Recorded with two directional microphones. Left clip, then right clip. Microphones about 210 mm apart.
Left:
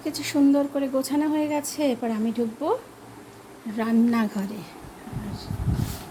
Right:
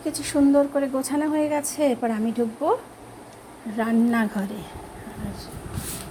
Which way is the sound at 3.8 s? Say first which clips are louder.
Right 1 dB; 10° left (ahead or behind).